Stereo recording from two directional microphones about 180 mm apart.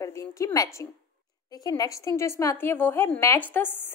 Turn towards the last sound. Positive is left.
turn(degrees=10)  # may be behind; listen again after turning